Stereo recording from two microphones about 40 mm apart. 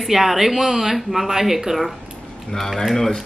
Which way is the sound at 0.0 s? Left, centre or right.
Centre.